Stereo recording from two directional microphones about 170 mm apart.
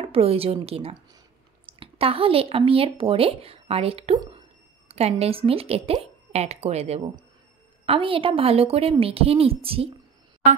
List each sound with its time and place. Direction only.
0.0 s speech: 35° right (ahead or behind)